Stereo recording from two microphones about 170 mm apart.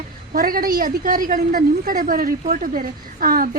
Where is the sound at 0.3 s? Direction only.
55° right (ahead or behind).